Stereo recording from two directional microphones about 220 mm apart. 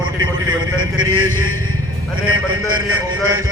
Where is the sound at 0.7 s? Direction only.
70° right (ahead or behind).